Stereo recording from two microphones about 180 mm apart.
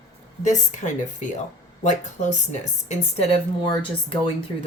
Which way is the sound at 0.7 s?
45° left (ahead or behind).